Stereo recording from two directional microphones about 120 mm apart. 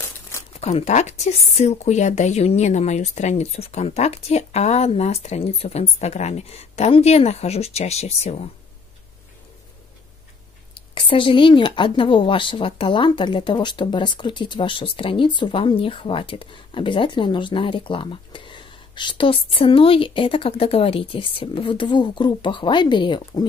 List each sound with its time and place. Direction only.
0.6 s a woman's voice: 65° left (ahead or behind)
11.0 s speech: 45° left (ahead or behind)